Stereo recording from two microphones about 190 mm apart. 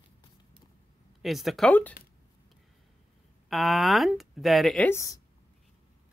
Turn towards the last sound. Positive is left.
turn(degrees=15)  # may be behind; listen again after turning